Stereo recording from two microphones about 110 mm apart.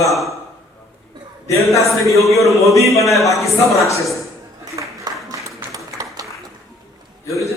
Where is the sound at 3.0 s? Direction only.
Centre (ahead or behind).